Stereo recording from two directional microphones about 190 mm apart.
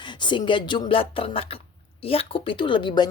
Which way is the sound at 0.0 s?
25° left (ahead or behind).